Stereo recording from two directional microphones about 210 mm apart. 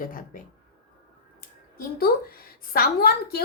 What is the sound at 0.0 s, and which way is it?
Speech, 40° left (ahead or behind).